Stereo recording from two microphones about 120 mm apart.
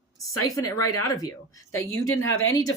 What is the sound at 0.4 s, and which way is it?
Speech, 30° left (ahead or behind).